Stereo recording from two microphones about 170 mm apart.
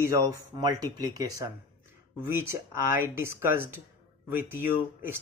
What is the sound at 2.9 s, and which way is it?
Speech, 15° right (ahead or behind).